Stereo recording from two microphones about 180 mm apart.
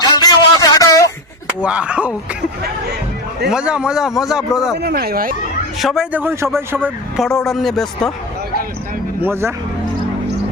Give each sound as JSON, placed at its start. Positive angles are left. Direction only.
{"t": 0.0, "sound": "a sound", "side_deg": 20}
{"t": 1.6, "sound": "a man's voice", "side_deg": -5}
{"t": 3.5, "sound": "speech", "side_deg": -5}
{"t": 4.8, "sound": "speech", "side_deg": -60}
{"t": 5.8, "sound": "a man's voice", "side_deg": 0}
{"t": 6.8, "sound": "speech", "side_deg": 0}
{"t": 9.2, "sound": "a man's voice", "side_deg": -15}